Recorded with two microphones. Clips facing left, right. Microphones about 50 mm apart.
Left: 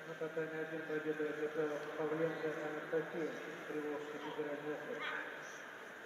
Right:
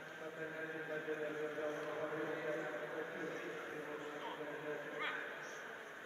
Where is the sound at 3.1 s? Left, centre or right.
Right.